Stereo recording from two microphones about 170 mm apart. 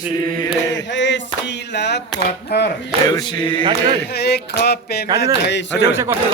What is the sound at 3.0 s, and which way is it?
Speech, 25° left (ahead or behind).